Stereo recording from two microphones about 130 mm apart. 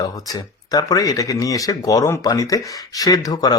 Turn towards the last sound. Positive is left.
turn(degrees=30)  # may be behind; listen again after turning